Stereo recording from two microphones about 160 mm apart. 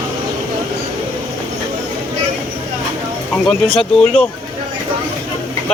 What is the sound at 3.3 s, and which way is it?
Speech, 5° left (ahead or behind).